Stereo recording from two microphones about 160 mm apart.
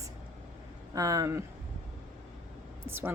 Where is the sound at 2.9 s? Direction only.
15° right (ahead or behind).